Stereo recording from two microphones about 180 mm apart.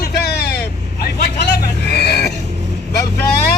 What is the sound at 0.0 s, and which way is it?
Vehicle, 60° left (ahead or behind).